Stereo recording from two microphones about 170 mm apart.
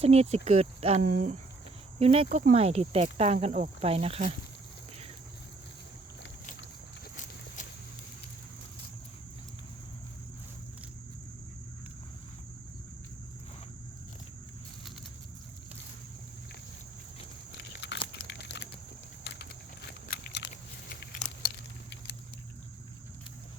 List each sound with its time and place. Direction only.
0.0 s speech: 40° right (ahead or behind)
1.0 s speech: 50° right (ahead or behind)
2.0 s speech: 35° right (ahead or behind)
7.2 s walk: 50° left (ahead or behind)
17.5 s biting: 85° left
18.1 s a sound: 80° left
19.2 s vehicle: 90° left
20.1 s a sound: 70° left (ahead or behind)
20.9 s patter: 55° left (ahead or behind)